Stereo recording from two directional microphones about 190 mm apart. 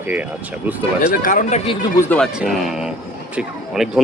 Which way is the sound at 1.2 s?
45° left (ahead or behind).